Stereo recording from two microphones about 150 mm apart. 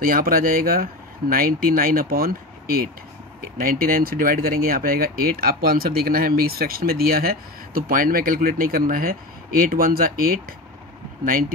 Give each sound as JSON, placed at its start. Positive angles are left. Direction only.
{"t": 0.0, "sound": "speech", "side_deg": -75}